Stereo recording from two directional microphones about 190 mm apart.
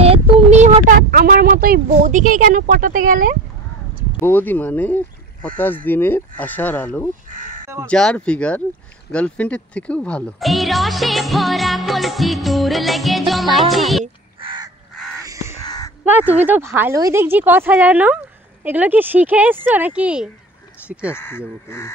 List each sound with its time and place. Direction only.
0.0 s speech: 35° right (ahead or behind)
4.2 s speech: 10° left (ahead or behind)
7.2 s crow: 45° right (ahead or behind)
7.8 s speech: 5° left (ahead or behind)
14.0 s crow: 25° right (ahead or behind)
15.1 s crow: 15° right (ahead or behind)
15.6 s a sound: 20° left (ahead or behind)
16.1 s a woman's voice: 10° right (ahead or behind)
21.1 s speech: 10° left (ahead or behind)